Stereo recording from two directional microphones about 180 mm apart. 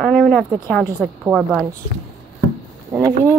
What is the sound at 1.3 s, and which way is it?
Speech, 5° left (ahead or behind).